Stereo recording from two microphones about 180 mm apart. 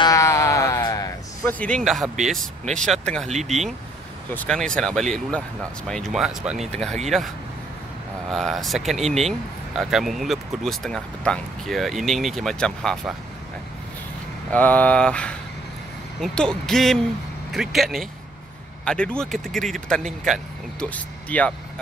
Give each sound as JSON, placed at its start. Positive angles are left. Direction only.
{"t": 0.0, "sound": "a sound", "side_deg": 20}
{"t": 2.7, "sound": "speech", "side_deg": 5}
{"t": 8.3, "sound": "speech", "side_deg": 0}
{"t": 14.5, "sound": "speech", "side_deg": 10}